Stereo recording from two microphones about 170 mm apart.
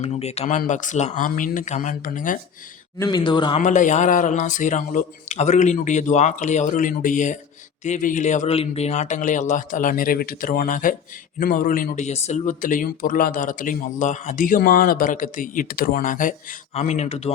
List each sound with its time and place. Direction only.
0.0 s speech: 40° left (ahead or behind)
3.0 s speech: 25° left (ahead or behind)
3.6 s speech: 45° left (ahead or behind)